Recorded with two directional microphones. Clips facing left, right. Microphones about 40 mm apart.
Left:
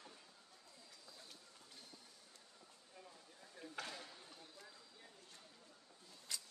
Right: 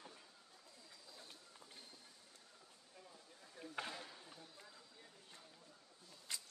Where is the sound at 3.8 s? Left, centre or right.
Centre.